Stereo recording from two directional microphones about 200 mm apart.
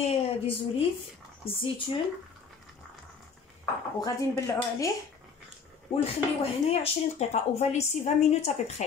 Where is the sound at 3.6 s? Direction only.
15° left (ahead or behind).